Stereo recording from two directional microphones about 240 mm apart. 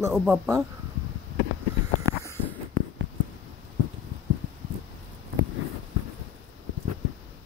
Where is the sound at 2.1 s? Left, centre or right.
Centre.